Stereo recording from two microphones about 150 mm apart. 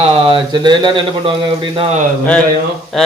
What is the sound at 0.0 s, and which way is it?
A man's voice, 40° right (ahead or behind).